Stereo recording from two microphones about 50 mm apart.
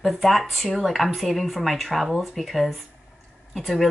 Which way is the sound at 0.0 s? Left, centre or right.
Centre.